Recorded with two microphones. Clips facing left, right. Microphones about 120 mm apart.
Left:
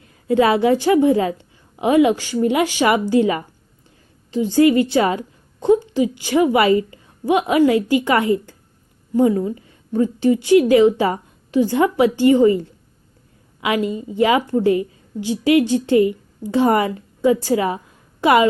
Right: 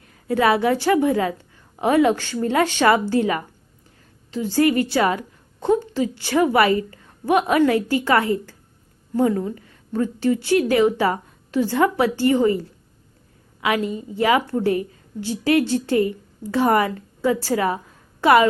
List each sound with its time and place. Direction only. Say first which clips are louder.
0.0 s a woman's voice: left 3 dB; 25° left (ahead or behind)
9.6 s a woman's voice: left 4 dB; 20° left (ahead or behind)